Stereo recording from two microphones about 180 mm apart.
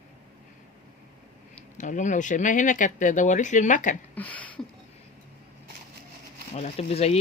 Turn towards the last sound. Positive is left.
turn(degrees=35)  # may be behind; listen again after turning